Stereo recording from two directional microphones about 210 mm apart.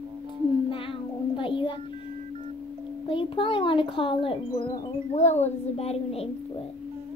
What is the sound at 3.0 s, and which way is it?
A child's voice, 25° left (ahead or behind).